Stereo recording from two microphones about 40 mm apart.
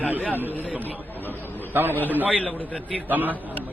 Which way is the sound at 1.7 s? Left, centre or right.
Right.